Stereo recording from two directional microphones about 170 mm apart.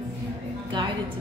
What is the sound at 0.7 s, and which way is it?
Speech, 30° right (ahead or behind).